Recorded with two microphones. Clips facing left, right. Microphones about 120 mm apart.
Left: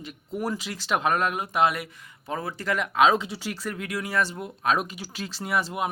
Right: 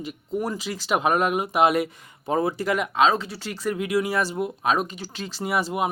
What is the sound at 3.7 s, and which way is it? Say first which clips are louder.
Speech: right 5 dB; 10° right (ahead or behind).